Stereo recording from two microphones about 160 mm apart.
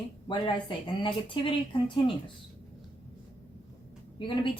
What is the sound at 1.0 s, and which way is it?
Speech, 30° left (ahead or behind).